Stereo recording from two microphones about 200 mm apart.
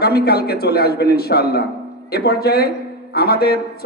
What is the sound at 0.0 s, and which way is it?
A man's voice, 50° left (ahead or behind).